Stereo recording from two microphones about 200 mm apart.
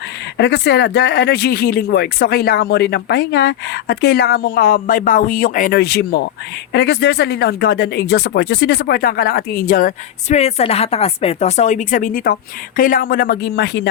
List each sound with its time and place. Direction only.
0.3 s speech: 60° left (ahead or behind)